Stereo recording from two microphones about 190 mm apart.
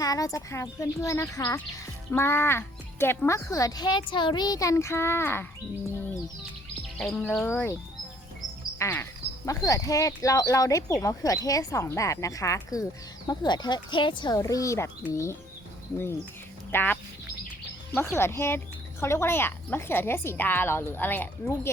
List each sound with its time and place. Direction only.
0.0 s speech: 20° left (ahead or behind)
7.0 s speech: 5° left (ahead or behind)
8.8 s music: 15° left (ahead or behind)
9.5 s speech: 15° left (ahead or behind)
16.7 s speech: 10° left (ahead or behind)